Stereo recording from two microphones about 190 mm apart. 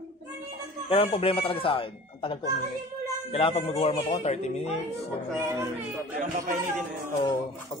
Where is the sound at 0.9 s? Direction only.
30° left (ahead or behind).